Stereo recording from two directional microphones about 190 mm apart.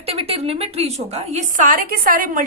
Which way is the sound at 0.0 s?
30° right (ahead or behind).